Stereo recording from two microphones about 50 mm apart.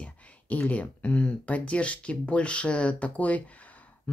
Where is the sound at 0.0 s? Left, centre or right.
Left.